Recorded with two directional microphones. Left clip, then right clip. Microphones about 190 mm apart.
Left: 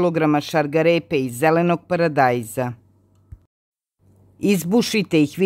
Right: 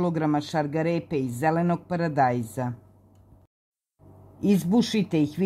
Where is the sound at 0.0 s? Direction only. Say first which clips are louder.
Left 7 dB; 20° left (ahead or behind).